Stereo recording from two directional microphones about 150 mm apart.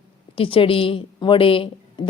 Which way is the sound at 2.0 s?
30° left (ahead or behind).